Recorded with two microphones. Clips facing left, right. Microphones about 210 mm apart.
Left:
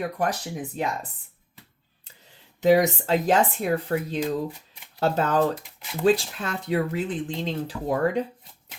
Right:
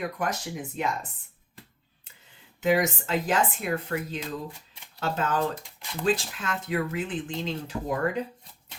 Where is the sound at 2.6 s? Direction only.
35° left (ahead or behind).